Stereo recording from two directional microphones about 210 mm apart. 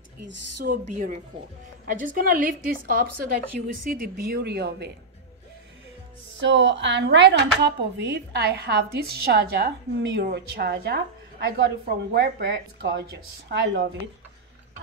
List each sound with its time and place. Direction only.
0.7 s a woman's voice: 40° right (ahead or behind)
6.4 s a woman's voice: 60° right (ahead or behind)